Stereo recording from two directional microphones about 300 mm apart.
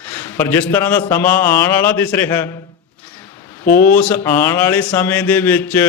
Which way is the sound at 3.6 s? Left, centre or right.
Left.